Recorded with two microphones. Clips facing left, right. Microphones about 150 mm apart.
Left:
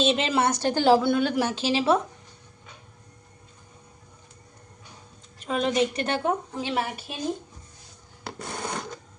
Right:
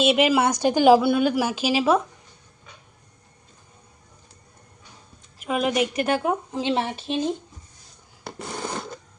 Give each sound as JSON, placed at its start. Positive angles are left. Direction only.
{"t": 0.0, "sound": "a woman's voice", "side_deg": -10}
{"t": 5.5, "sound": "a woman's voice", "side_deg": -10}
{"t": 6.6, "sound": "speech", "side_deg": -25}